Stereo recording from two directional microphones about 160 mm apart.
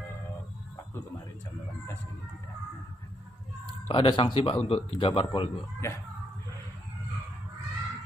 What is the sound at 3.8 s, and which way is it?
A man's voice, 35° left (ahead or behind).